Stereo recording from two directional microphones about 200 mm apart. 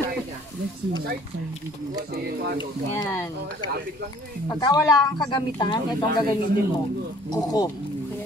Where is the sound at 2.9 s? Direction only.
15° left (ahead or behind).